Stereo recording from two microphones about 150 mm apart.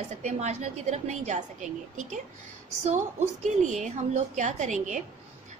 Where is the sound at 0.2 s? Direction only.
50° right (ahead or behind).